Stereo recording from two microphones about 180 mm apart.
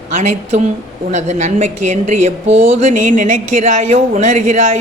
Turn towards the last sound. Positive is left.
turn(degrees=-40)  # may be behind; listen again after turning